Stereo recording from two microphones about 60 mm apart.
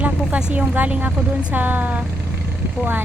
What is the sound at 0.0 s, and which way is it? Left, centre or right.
Speech, right.